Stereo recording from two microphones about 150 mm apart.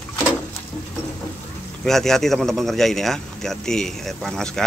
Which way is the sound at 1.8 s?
Centre (ahead or behind).